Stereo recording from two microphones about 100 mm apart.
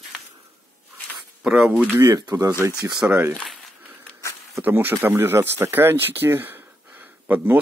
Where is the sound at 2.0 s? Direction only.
40° right (ahead or behind).